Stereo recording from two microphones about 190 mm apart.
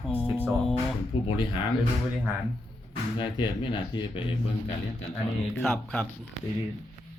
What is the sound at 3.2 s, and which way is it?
Speech, 25° left (ahead or behind).